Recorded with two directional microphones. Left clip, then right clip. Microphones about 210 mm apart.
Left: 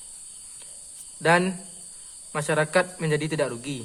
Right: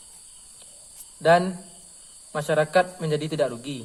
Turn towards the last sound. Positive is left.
turn(degrees=30)  # may be behind; listen again after turning